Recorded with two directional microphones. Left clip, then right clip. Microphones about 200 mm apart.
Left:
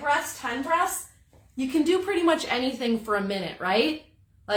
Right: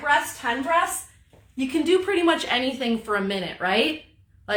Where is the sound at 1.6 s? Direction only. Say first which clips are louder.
Right 2 dB; 15° left (ahead or behind).